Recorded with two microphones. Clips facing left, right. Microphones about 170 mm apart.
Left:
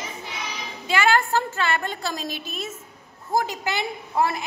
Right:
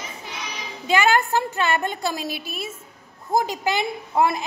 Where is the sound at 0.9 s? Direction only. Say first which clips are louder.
Right 2 dB; 15° right (ahead or behind).